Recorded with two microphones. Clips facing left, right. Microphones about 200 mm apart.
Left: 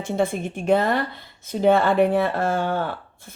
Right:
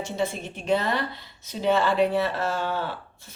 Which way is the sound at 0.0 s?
50° left (ahead or behind).